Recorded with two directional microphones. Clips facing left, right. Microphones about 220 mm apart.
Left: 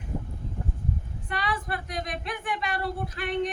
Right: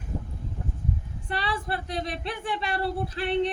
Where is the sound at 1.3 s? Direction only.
30° right (ahead or behind).